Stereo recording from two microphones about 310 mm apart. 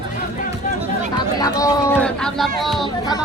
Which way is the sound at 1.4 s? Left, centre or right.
Centre.